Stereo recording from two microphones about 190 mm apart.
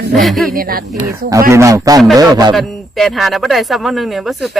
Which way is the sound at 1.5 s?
15° right (ahead or behind).